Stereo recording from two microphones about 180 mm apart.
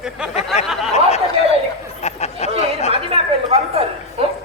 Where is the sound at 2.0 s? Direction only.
35° left (ahead or behind).